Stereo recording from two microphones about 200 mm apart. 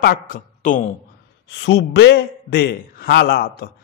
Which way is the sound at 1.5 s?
65° left (ahead or behind).